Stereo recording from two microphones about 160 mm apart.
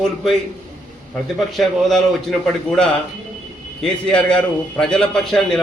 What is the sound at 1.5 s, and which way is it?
Speech, centre (ahead or behind).